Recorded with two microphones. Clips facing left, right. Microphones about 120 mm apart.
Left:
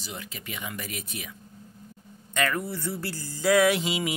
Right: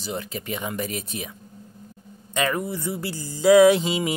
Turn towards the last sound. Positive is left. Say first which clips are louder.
# right 7 dB
turn(degrees=-30)  # may be behind; listen again after turning